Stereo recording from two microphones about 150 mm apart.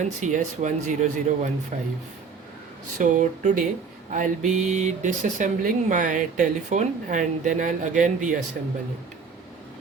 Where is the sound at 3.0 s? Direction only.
55° right (ahead or behind).